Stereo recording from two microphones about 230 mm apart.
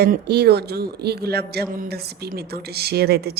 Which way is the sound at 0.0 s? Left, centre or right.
Right.